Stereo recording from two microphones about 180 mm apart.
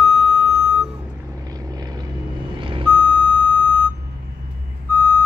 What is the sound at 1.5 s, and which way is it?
Vehicle, 20° right (ahead or behind).